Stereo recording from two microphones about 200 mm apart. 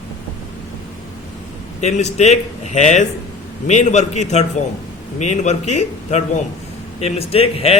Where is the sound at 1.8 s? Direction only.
35° left (ahead or behind).